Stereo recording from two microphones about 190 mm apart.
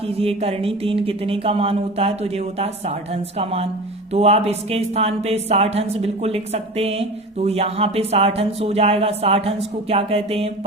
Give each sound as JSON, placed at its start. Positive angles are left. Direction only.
{"t": 0.2, "sound": "a woman's voice", "side_deg": -30}